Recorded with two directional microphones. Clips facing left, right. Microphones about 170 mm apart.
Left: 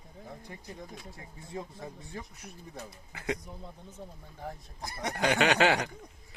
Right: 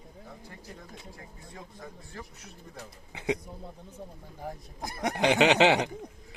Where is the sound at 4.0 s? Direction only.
Centre (ahead or behind).